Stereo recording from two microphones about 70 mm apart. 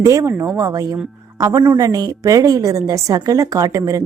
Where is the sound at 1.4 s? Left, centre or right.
Right.